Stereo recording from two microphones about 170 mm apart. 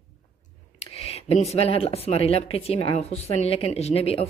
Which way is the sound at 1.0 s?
35° left (ahead or behind).